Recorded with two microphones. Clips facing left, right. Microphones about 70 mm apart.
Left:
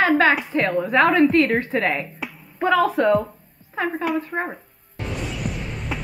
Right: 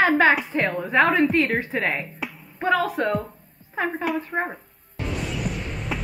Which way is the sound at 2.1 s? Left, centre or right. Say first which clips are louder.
Left 4 dB; centre.